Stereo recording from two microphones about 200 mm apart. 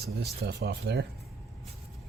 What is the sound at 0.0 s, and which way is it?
Speech, 55° right (ahead or behind).